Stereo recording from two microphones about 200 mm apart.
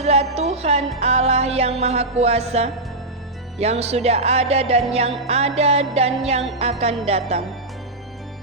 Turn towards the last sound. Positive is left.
turn(degrees=-30)  # may be behind; listen again after turning